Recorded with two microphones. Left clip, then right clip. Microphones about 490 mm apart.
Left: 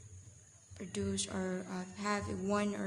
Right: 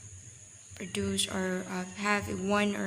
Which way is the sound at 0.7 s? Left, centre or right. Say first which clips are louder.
Right 6 dB; left.